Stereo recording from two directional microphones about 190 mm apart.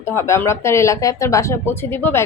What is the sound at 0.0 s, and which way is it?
A woman's voice, 15° left (ahead or behind).